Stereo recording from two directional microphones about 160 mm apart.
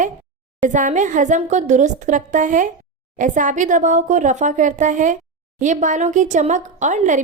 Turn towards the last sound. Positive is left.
turn(degrees=-50)  # may be behind; listen again after turning